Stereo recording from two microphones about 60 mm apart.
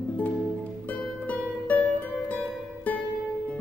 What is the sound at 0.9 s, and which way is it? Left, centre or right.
Music, left.